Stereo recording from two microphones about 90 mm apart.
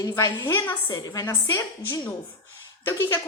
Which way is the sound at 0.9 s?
40° left (ahead or behind).